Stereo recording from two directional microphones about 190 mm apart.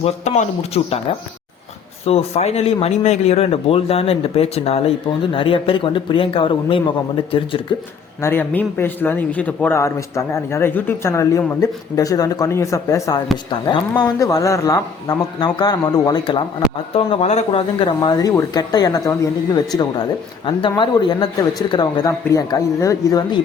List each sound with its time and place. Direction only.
0.0 s speech: 35° left (ahead or behind)
2.0 s a man's voice: 35° left (ahead or behind)
8.2 s a man's voice: 10° left (ahead or behind)
17.1 s a man's voice: 30° left (ahead or behind)